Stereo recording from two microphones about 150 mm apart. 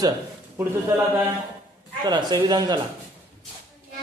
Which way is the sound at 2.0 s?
30° right (ahead or behind).